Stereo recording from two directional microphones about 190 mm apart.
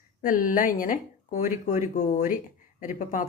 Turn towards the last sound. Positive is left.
turn(degrees=45)  # may be behind; listen again after turning